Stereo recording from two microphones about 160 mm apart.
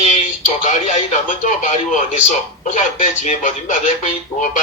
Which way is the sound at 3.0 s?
50° left (ahead or behind).